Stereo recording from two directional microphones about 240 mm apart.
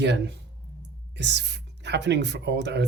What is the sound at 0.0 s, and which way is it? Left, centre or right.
Speech, right.